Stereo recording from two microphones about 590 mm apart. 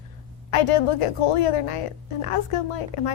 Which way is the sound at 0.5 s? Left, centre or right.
Left.